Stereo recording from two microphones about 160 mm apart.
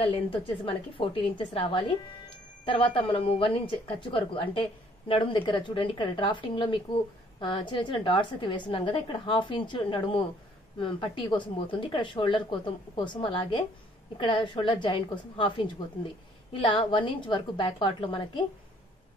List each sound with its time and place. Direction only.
0.0 s speech: 35° left (ahead or behind)